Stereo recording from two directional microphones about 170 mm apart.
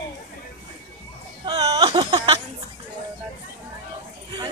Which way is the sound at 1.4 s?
25° right (ahead or behind).